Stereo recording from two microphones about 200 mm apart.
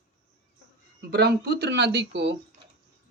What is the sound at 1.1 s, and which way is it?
Speech, 55° right (ahead or behind).